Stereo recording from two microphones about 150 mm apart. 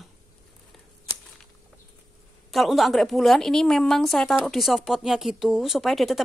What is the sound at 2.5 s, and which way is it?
A woman's voice, centre (ahead or behind).